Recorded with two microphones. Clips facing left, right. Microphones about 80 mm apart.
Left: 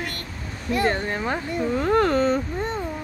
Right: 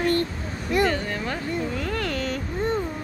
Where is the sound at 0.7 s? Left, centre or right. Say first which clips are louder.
Even; left.